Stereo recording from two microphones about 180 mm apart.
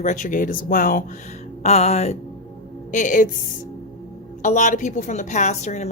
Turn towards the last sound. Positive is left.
turn(degrees=40)  # may be behind; listen again after turning